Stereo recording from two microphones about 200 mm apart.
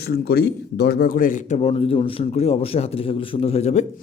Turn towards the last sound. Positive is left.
turn(degrees=35)  # may be behind; listen again after turning